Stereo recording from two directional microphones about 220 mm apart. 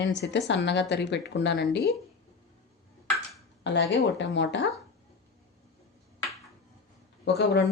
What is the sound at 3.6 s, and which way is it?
Speech, 55° left (ahead or behind).